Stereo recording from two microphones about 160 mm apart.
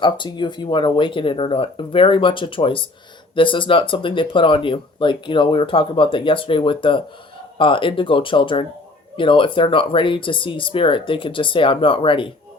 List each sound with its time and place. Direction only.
0.0 s speech: 30° left (ahead or behind)